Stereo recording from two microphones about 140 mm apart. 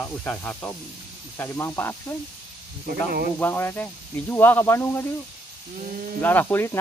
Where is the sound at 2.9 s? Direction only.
90° right.